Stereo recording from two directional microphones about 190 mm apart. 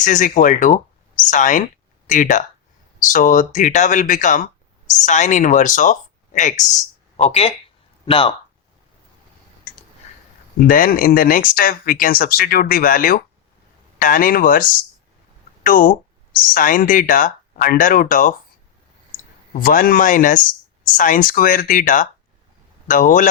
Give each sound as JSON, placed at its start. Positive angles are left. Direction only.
{"t": 0.0, "sound": "speech", "side_deg": 40}
{"t": 10.6, "sound": "speech", "side_deg": 50}
{"t": 19.5, "sound": "speech", "side_deg": 50}